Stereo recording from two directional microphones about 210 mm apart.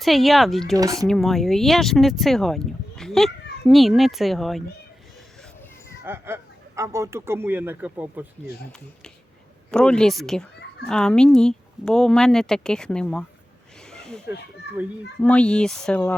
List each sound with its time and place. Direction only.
0.0 s speech: centre (ahead or behind)
0.8 s speech: 15° right (ahead or behind)
1.0 s speech: centre (ahead or behind)
6.1 s speech: 10° right (ahead or behind)
9.7 s speech: 5° left (ahead or behind)
13.9 s a sound: 5° left (ahead or behind)
15.2 s speech: 5° left (ahead or behind)